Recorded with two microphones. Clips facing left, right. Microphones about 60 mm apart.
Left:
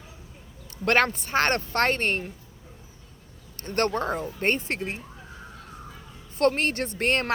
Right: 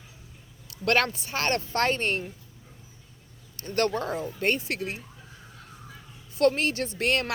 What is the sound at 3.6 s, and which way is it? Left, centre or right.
A woman's voice, left.